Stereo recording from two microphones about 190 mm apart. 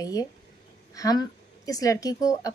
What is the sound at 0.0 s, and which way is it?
A woman's voice, 20° left (ahead or behind).